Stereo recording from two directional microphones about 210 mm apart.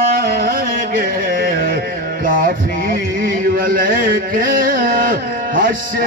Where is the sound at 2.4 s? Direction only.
45° right (ahead or behind).